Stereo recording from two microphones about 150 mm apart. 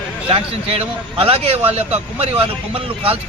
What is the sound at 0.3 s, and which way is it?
Speech, 40° right (ahead or behind).